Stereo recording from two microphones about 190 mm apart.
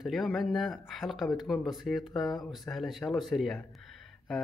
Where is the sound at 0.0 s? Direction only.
Centre (ahead or behind).